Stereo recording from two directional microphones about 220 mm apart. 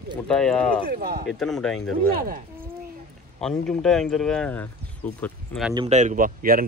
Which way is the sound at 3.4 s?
5° left (ahead or behind).